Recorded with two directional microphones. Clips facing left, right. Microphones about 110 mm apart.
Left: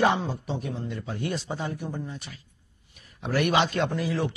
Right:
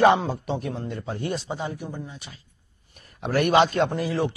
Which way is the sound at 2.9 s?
45° right (ahead or behind).